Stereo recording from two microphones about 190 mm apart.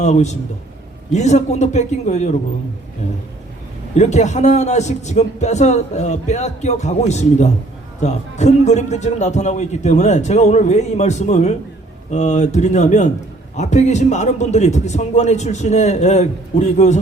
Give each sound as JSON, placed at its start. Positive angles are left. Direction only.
{"t": 0.0, "sound": "a man's voice", "side_deg": 35}
{"t": 3.9, "sound": "a man's voice", "side_deg": 35}